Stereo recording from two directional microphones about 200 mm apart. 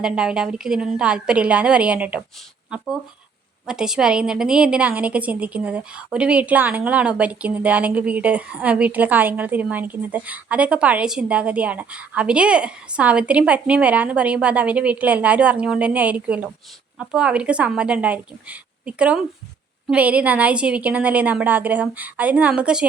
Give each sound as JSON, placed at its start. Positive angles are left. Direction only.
{"t": 0.0, "sound": "a woman's voice", "side_deg": -5}